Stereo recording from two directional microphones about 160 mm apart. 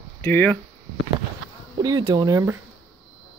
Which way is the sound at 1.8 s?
25° right (ahead or behind).